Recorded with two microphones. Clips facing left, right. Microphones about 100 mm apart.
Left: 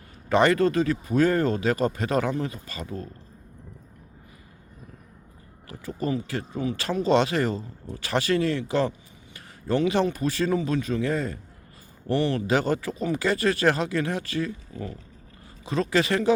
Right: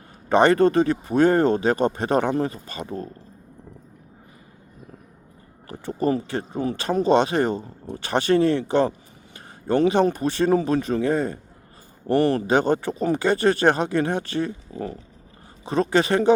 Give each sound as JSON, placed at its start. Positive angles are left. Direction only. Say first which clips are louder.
{"t": 0.3, "sound": "speech", "louder": "right 4 dB", "side_deg": -25}
{"t": 5.6, "sound": "speech", "louder": "right 6 dB", "side_deg": -30}
{"t": 10.1, "sound": "speech", "louder": "right 5 dB", "side_deg": -30}
{"t": 12.0, "sound": "a man's voice", "louder": "right 5 dB", "side_deg": -50}
{"t": 12.4, "sound": "speech", "louder": "right 4 dB", "side_deg": -25}